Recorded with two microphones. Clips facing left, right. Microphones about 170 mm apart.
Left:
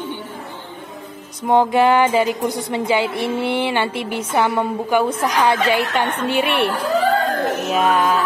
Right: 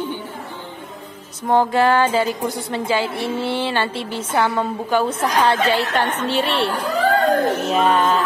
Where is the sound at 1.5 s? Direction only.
20° left (ahead or behind).